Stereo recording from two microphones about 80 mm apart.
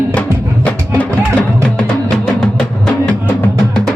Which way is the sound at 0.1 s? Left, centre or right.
Centre.